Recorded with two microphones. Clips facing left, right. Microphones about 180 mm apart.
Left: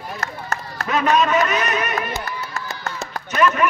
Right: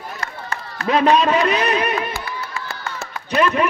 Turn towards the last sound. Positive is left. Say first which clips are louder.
# right 1 dB
turn(degrees=-30)  # may be behind; listen again after turning